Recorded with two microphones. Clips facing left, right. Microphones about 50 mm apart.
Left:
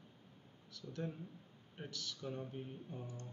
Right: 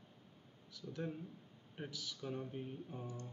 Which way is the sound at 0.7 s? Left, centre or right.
Centre.